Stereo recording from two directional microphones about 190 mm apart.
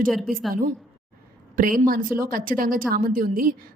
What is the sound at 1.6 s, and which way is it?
A woman's voice, 45° right (ahead or behind).